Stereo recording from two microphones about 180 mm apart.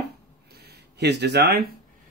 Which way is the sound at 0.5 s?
65° right (ahead or behind).